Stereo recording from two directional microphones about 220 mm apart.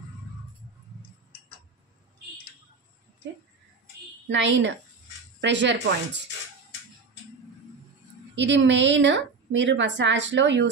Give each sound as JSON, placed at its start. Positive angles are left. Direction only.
{"t": 4.3, "sound": "a woman's voice", "side_deg": -55}
{"t": 8.4, "sound": "a woman's voice", "side_deg": -55}